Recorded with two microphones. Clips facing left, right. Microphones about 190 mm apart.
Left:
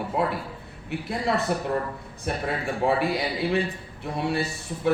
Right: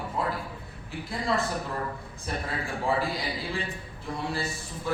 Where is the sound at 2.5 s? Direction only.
65° left (ahead or behind).